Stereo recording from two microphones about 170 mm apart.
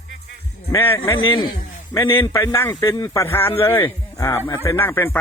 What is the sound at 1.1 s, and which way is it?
A man's voice, 30° left (ahead or behind).